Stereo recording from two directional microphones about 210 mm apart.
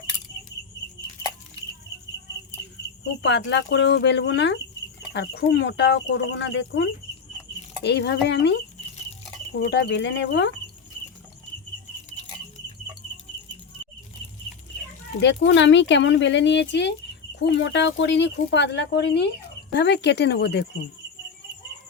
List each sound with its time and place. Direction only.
3.2 s speech: 55° left (ahead or behind)
9.6 s speech: 50° left (ahead or behind)
15.2 s speech: 60° left (ahead or behind)